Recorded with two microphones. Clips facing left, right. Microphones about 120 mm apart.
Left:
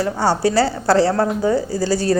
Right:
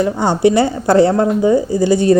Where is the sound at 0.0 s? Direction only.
20° right (ahead or behind).